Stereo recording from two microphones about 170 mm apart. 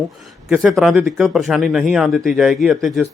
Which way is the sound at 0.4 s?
5° right (ahead or behind).